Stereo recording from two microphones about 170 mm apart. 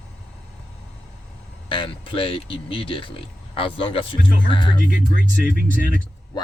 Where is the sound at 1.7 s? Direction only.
30° left (ahead or behind).